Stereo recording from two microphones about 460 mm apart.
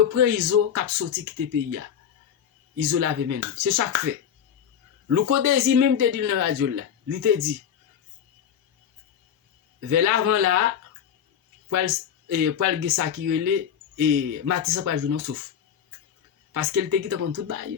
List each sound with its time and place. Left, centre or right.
0.1 s speech: right
2.7 s speech: right
5.0 s speech: right
9.9 s speech: right
11.7 s speech: right
16.5 s speech: right